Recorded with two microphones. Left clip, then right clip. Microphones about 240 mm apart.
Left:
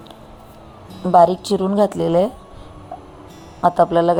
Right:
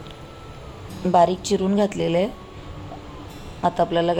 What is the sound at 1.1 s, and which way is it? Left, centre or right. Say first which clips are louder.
Speech: left 5 dB; centre.